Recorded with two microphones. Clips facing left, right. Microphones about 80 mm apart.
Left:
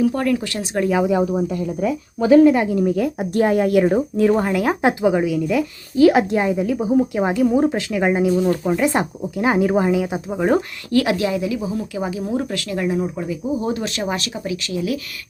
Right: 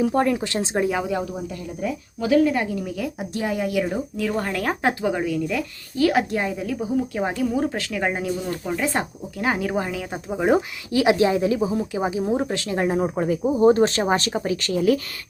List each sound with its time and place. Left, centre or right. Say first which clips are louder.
0.0 s speech: left 1 dB; right
1.0 s speech: left 7 dB; centre
2.2 s a woman's voice: left 7 dB; left
2.8 s speech: left 9 dB; left
4.2 s a woman's voice: left 9 dB; left
4.4 s speech: left 5 dB; centre
6.0 s a woman's voice: left 6 dB; left
10.2 s speech: right 2 dB; centre
11.0 s speech: right 2 dB; right